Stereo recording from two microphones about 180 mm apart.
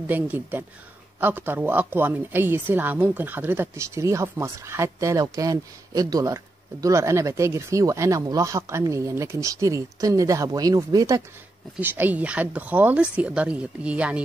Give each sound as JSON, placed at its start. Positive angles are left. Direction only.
{"t": 0.0, "sound": "a woman's voice", "side_deg": -10}